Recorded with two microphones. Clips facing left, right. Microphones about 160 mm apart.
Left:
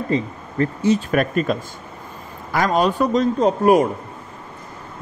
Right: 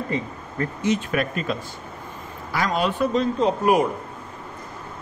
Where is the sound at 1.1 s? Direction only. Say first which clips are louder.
Left 5 dB; 45° left (ahead or behind).